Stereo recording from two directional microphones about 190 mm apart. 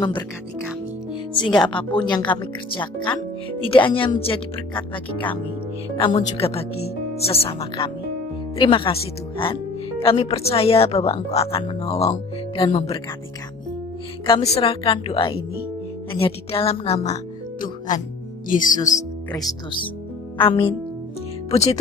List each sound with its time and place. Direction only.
1.7 s a woman's voice: 25° left (ahead or behind)
14.2 s speech: 30° left (ahead or behind)
19.3 s speech: 20° left (ahead or behind)